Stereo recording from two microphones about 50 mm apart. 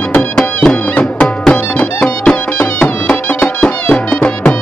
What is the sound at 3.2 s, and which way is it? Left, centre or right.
Music, left.